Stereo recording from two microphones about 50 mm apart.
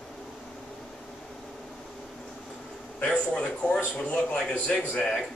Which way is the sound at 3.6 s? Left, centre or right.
Left.